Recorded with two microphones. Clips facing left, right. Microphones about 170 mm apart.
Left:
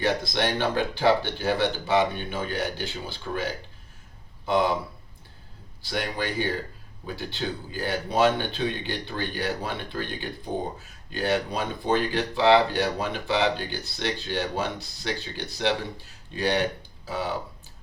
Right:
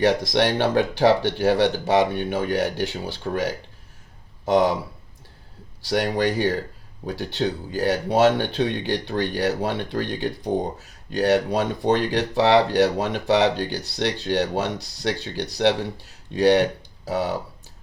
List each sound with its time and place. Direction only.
0.0 s speech: 80° right
5.8 s speech: 80° right